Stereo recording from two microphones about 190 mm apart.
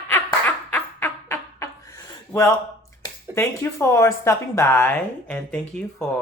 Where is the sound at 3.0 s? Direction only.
15° left (ahead or behind).